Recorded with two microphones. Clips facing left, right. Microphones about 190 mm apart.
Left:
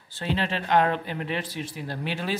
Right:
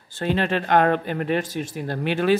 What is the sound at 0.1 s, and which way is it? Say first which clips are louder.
Speech: right 5 dB; 50° right (ahead or behind).